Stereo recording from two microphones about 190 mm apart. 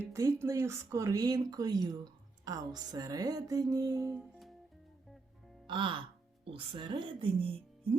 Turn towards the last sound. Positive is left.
turn(degrees=-30)  # may be behind; listen again after turning